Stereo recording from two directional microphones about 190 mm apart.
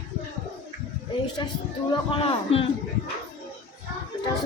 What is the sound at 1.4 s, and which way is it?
A woman's voice, 25° left (ahead or behind).